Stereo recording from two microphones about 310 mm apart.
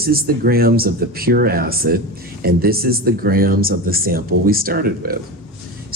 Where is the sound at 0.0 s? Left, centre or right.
Right.